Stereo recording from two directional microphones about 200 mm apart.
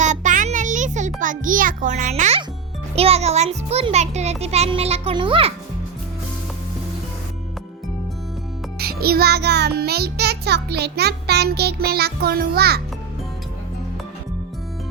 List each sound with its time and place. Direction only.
0.0 s a sound: 35° right (ahead or behind)
2.9 s a child's voice: 30° right (ahead or behind)
8.8 s a child's voice: 50° right (ahead or behind)